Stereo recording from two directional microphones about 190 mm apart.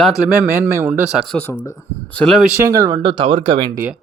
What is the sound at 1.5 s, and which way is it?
Speech, 15° left (ahead or behind).